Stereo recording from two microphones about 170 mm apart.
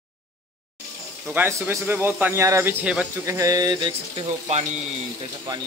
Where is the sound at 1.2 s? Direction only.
10° right (ahead or behind).